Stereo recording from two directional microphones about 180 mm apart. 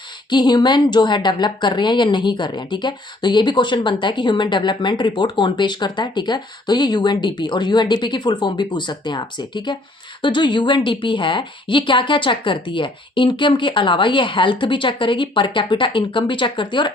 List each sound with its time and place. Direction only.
0.3 s speech: 25° left (ahead or behind)